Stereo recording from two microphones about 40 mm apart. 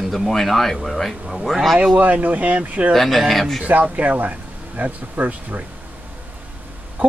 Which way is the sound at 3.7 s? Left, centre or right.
Right.